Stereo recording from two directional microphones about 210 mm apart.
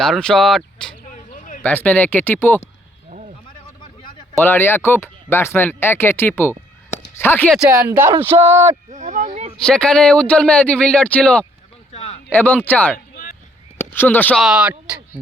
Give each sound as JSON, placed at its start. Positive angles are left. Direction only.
{"t": 0.0, "sound": "speech", "side_deg": 5}
{"t": 1.0, "sound": "a sound", "side_deg": 35}
{"t": 1.6, "sound": "speech", "side_deg": 5}
{"t": 3.1, "sound": "a sound", "side_deg": -35}
{"t": 4.4, "sound": "speech", "side_deg": 10}
{"t": 7.9, "sound": "speech", "side_deg": -10}
{"t": 8.9, "sound": "speech", "side_deg": -35}
{"t": 9.6, "sound": "speech", "side_deg": 5}
{"t": 11.9, "sound": "a sound", "side_deg": 30}
{"t": 12.3, "sound": "speech", "side_deg": 10}